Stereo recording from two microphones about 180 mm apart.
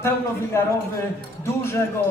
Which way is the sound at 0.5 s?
15° left (ahead or behind).